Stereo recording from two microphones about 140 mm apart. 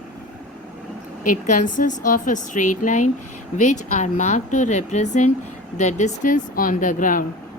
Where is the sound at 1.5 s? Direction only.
65° left (ahead or behind).